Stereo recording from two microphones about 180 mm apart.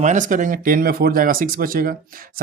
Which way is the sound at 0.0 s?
45° right (ahead or behind).